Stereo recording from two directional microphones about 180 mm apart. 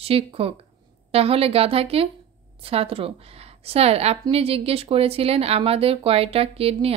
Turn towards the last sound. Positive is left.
turn(degrees=-35)  # may be behind; listen again after turning